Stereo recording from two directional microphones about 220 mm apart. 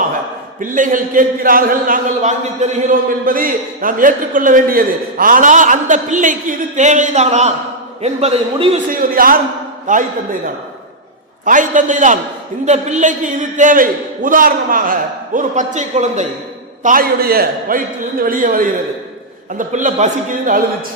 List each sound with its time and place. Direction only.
0.6 s a man's voice: 35° right (ahead or behind)
8.9 s a man's voice: 40° right (ahead or behind)
11.4 s a man's voice: 35° right (ahead or behind)